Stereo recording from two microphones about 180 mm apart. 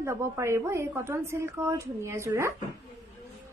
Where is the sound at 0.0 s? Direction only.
15° right (ahead or behind).